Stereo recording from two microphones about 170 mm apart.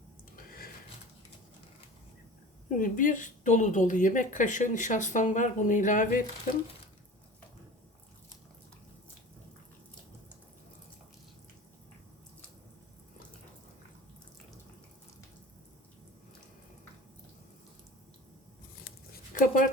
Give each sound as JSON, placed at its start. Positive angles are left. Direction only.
{"t": 2.6, "sound": "a woman's voice", "side_deg": 50}
{"t": 18.9, "sound": "zipper", "side_deg": 55}